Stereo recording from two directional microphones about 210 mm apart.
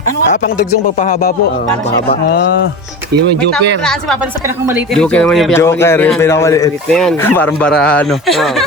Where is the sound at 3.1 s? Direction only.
50° right (ahead or behind).